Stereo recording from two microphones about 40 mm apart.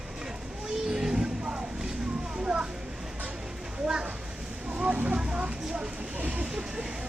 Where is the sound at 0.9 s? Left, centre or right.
Centre.